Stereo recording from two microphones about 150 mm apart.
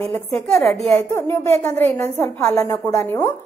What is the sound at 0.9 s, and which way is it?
A woman's voice, 15° left (ahead or behind).